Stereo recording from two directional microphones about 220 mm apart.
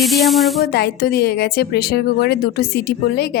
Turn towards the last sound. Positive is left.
turn(degrees=45)  # may be behind; listen again after turning